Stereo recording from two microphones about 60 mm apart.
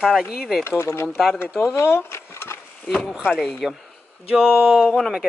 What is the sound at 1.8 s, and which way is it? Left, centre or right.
Speech, left.